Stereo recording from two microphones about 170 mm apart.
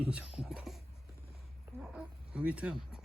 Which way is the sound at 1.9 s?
5° right (ahead or behind).